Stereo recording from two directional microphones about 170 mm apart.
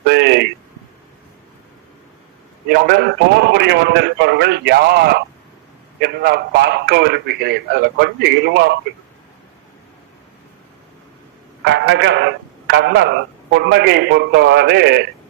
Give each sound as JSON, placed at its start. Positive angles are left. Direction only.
{"t": 0.1, "sound": "a sound", "side_deg": -80}
{"t": 2.6, "sound": "a man's voice", "side_deg": -65}
{"t": 11.6, "sound": "speech", "side_deg": -90}